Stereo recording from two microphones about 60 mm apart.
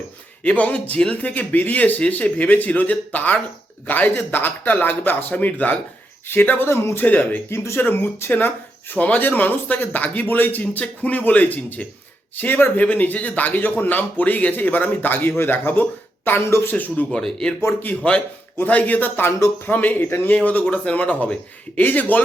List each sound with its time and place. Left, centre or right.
0.4 s speech: left
6.7 s speech: left
7.0 s speech: left
7.5 s speech: left
7.8 s speech: left
17.6 s speech: left
18.5 s speech: left
20.3 s speech: left